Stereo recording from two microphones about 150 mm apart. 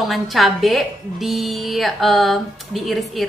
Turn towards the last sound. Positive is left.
turn(degrees=0)  # may be behind; listen again after turning